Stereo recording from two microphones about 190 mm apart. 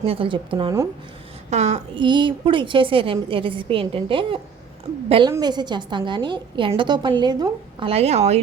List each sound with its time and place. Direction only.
0.0 s a woman's voice: 30° right (ahead or behind)
1.5 s a woman's voice: 35° right (ahead or behind)
2.0 s a woman's voice: 25° right (ahead or behind)